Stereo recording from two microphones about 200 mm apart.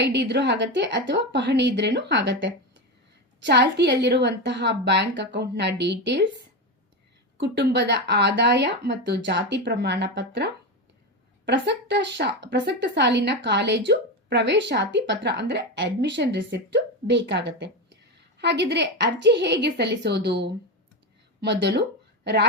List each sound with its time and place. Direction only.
0.0 s a woman's voice: 60° right (ahead or behind)
7.3 s a woman's voice: 55° right (ahead or behind)